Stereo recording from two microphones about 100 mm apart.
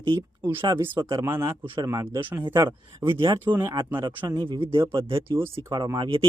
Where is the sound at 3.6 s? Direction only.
35° right (ahead or behind).